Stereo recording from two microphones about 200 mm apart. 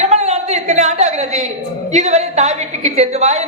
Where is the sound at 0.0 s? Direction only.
35° right (ahead or behind).